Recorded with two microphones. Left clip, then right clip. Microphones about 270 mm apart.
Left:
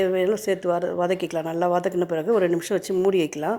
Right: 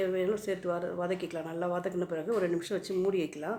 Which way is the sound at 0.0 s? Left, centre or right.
Left.